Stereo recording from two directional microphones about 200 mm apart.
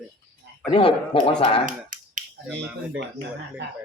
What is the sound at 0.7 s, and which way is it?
Speech, 25° left (ahead or behind).